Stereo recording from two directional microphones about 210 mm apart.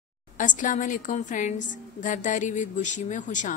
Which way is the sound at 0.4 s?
35° left (ahead or behind).